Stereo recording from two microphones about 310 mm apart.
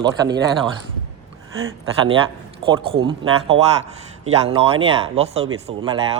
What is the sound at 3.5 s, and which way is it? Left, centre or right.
Speech, right.